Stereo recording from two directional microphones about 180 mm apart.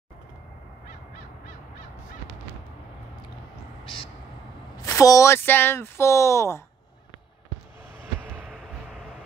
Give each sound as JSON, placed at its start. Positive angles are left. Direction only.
{"t": 3.8, "sound": "vehicle", "side_deg": 30}
{"t": 4.8, "sound": "speech", "side_deg": 20}
{"t": 8.2, "sound": "a sound", "side_deg": -10}